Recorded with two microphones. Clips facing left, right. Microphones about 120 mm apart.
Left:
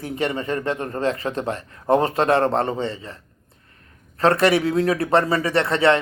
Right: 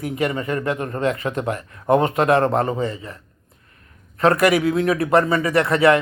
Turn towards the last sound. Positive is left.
turn(degrees=30)  # may be behind; listen again after turning